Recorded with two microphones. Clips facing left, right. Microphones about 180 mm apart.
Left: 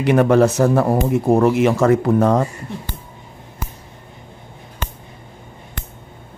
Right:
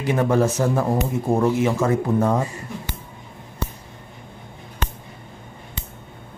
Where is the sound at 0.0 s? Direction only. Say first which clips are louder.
Left 6 dB; 75° left (ahead or behind).